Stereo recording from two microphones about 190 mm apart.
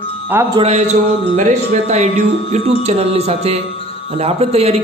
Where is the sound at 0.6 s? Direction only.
35° right (ahead or behind).